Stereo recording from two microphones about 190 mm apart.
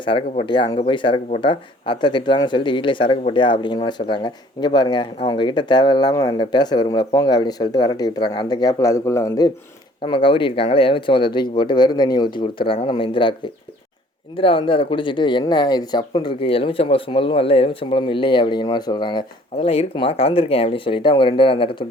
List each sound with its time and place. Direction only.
0.0 s speech: 25° left (ahead or behind)
10.0 s speech: 25° left (ahead or behind)